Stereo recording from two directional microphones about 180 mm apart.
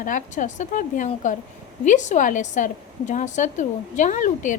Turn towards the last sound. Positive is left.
turn(degrees=45)  # may be behind; listen again after turning